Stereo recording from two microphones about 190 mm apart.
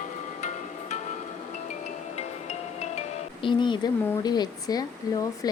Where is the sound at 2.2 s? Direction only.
35° left (ahead or behind).